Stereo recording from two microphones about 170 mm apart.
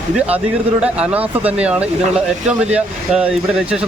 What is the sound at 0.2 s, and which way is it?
Speech, 5° right (ahead or behind).